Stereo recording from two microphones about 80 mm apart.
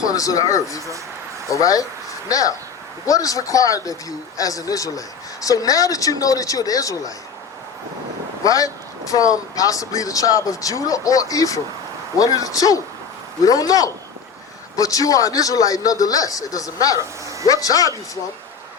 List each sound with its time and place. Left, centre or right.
0.0 s speech: left
8.4 s speech: left